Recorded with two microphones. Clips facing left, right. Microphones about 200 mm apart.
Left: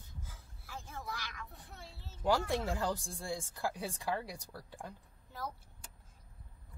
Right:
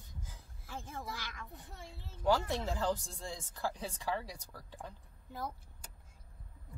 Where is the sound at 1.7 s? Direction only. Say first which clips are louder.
Right 2 dB; 15° right (ahead or behind).